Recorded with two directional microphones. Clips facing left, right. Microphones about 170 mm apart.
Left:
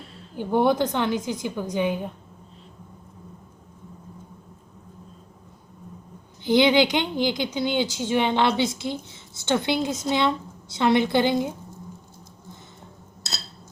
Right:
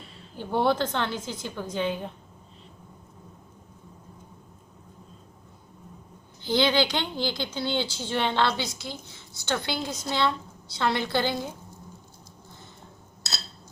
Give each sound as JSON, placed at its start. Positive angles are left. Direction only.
{"t": 0.3, "sound": "a woman's voice", "side_deg": 15}
{"t": 6.4, "sound": "speech", "side_deg": 20}